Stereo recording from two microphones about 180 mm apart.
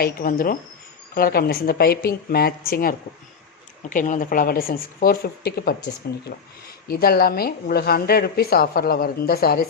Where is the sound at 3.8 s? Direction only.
45° left (ahead or behind).